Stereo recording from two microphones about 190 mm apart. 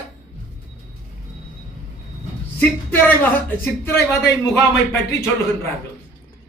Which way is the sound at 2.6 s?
10° left (ahead or behind).